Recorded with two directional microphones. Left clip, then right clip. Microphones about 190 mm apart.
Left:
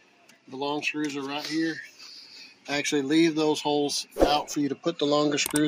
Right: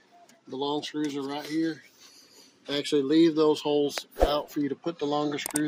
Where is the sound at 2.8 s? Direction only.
25° left (ahead or behind).